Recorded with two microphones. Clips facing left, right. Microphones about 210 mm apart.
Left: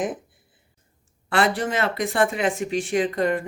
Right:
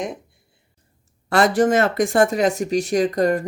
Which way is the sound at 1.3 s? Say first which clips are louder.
Right 6 dB; 45° right (ahead or behind).